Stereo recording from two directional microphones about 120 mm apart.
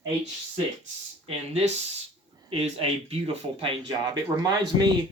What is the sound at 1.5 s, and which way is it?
Speech, 60° right (ahead or behind).